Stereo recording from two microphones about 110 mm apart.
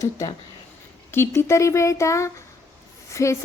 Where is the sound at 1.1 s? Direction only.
20° left (ahead or behind).